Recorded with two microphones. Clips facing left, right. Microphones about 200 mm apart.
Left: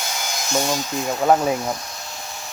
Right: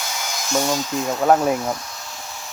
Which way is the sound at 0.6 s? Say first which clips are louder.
Right 2 dB; 15° left (ahead or behind).